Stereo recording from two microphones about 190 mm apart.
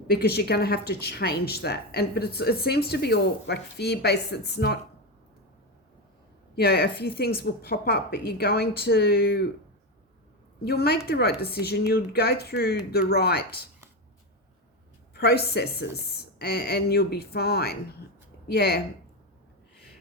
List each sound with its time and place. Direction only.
0.1 s speech: 55° left (ahead or behind)
6.6 s speech: 55° left (ahead or behind)
10.6 s speech: 55° left (ahead or behind)
15.1 s speech: 55° left (ahead or behind)